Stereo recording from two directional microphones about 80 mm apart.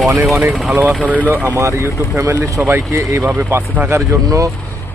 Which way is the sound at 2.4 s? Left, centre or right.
Right.